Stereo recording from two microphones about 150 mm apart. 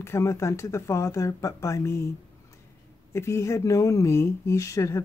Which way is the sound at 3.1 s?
20° left (ahead or behind).